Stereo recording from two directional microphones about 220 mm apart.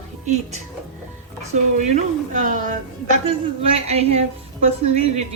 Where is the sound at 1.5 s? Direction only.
35° right (ahead or behind).